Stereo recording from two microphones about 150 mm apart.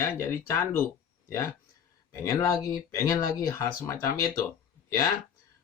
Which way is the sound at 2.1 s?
20° left (ahead or behind).